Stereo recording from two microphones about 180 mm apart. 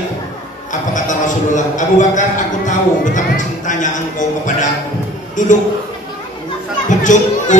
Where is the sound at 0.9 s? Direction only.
45° left (ahead or behind).